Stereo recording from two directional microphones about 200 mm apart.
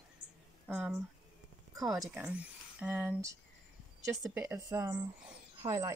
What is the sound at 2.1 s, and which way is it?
Speech, 5° right (ahead or behind).